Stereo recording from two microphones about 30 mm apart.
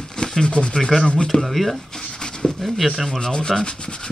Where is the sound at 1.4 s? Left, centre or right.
Centre.